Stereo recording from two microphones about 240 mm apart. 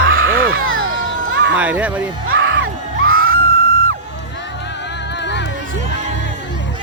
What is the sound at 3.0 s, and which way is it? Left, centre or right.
Screaming, right.